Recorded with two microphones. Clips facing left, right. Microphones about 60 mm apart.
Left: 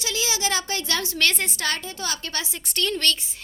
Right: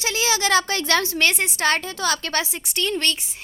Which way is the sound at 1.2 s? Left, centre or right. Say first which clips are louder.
Right 3 dB; centre.